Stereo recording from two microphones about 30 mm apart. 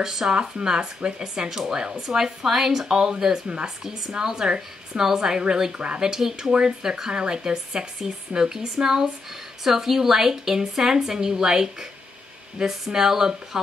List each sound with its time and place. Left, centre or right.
0.0 s a woman's voice: centre
0.4 s a woman's voice: right
3.4 s speech: right
4.1 s a woman's voice: centre
5.7 s speech: right
5.9 s a woman's voice: centre